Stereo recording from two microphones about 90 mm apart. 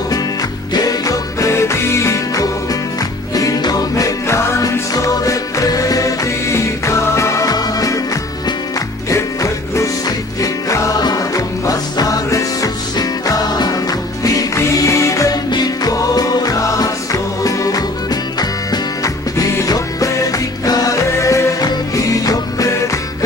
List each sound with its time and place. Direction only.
0.7 s music: 40° left (ahead or behind)
9.1 s music: 35° left (ahead or behind)